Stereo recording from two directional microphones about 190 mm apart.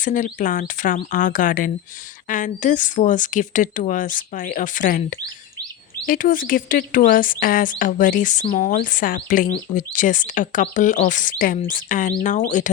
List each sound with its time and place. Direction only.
0.0 s speech: 45° left (ahead or behind)